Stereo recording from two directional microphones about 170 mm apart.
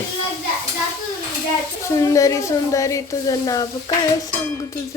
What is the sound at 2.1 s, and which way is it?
Sizzle, 20° left (ahead or behind).